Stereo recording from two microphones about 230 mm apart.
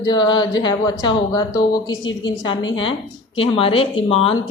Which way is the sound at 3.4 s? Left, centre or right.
Left.